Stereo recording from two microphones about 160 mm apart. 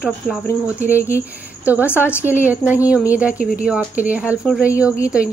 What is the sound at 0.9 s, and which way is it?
Speech, 15° left (ahead or behind).